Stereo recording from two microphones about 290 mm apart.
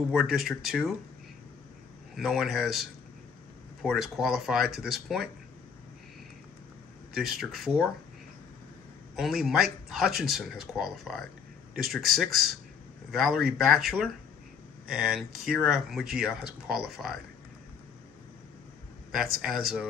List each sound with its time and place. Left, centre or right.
0.1 s speech: centre
2.1 s speech: centre
7.2 s speech: centre
9.1 s speech: centre
19.4 s speech: centre